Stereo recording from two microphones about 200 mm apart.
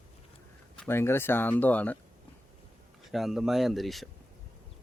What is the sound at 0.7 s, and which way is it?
Speech, 10° left (ahead or behind).